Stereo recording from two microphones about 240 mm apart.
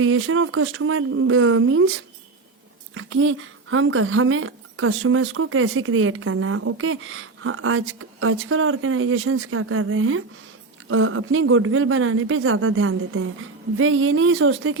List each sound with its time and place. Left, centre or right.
0.0 s speech: right